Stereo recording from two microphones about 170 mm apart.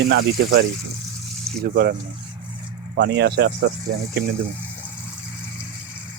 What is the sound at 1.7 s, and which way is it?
Speech, 65° right (ahead or behind).